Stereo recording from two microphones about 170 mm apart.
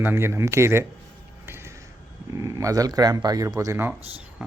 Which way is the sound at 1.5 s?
15° right (ahead or behind).